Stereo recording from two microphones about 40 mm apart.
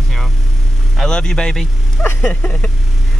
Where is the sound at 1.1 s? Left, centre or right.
Left.